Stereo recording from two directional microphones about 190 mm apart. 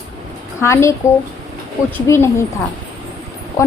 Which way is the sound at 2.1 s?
15° left (ahead or behind).